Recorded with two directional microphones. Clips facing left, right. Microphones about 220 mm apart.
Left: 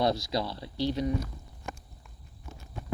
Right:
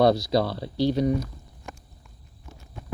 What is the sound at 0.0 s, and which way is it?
Speech, 55° right (ahead or behind).